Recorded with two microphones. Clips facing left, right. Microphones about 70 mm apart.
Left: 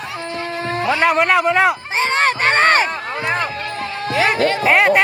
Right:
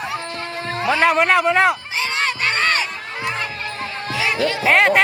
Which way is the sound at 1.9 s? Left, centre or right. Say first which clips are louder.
Left 5 dB; left.